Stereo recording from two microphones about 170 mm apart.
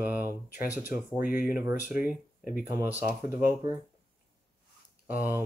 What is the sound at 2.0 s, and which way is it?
Speech, 55° left (ahead or behind).